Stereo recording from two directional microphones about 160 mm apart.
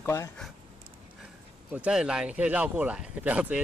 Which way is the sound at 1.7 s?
5° right (ahead or behind).